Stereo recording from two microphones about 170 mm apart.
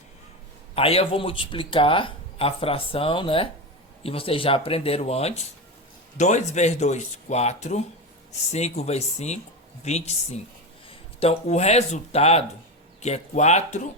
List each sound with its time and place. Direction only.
0.8 s speech: 35° left (ahead or behind)